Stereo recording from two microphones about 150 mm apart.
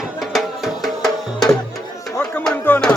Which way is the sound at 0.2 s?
Centre (ahead or behind).